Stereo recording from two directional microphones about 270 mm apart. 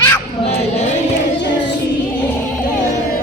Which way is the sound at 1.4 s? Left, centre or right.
Left.